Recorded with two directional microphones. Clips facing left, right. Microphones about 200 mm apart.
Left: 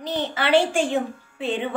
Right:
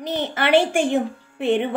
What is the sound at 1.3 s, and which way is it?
Music, 60° right (ahead or behind).